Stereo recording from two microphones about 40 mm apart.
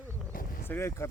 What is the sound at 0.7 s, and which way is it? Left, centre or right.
Speech, left.